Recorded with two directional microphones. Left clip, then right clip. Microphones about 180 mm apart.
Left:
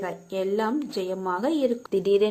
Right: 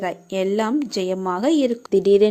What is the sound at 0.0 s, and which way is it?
A woman's voice, 50° right (ahead or behind).